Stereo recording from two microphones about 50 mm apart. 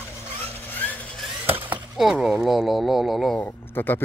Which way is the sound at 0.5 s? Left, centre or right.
Left.